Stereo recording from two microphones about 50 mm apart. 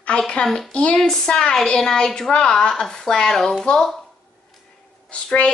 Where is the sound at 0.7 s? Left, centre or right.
Left.